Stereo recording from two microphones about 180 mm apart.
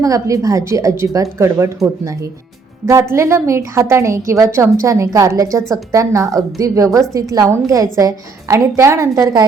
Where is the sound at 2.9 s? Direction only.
15° right (ahead or behind).